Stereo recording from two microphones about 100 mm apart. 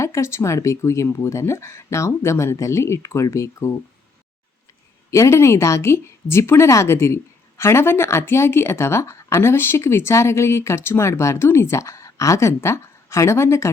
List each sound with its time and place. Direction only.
0.0 s a woman's voice: 30° left (ahead or behind)
5.1 s a woman's voice: 30° left (ahead or behind)